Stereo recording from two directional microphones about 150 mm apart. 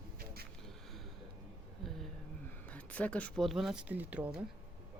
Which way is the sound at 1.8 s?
Centre (ahead or behind).